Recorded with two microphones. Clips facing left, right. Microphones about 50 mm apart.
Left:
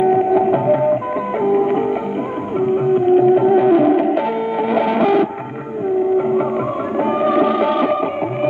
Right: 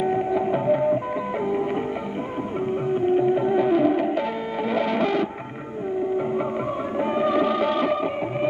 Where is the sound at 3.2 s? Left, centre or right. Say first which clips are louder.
Left 9 dB; left.